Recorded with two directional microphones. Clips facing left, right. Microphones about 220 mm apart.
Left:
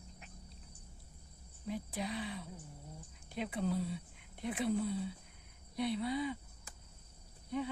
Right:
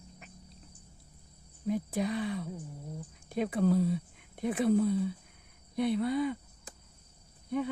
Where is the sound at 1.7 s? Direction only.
50° right (ahead or behind).